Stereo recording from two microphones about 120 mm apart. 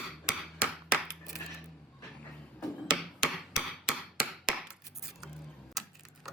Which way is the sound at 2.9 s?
5° right (ahead or behind).